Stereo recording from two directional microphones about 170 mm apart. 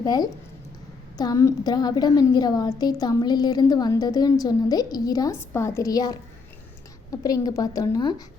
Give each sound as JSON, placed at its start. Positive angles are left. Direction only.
{"t": 0.0, "sound": "a woman's voice", "side_deg": 25}
{"t": 7.2, "sound": "a woman's voice", "side_deg": 20}